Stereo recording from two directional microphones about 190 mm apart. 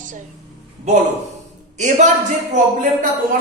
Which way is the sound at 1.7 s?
40° right (ahead or behind).